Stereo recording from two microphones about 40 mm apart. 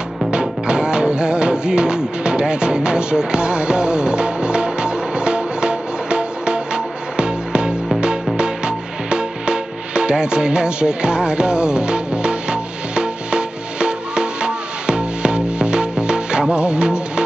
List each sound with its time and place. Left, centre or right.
0.3 s music: centre